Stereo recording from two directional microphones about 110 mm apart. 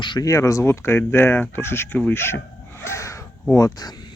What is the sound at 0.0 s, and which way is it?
Speech, 45° left (ahead or behind).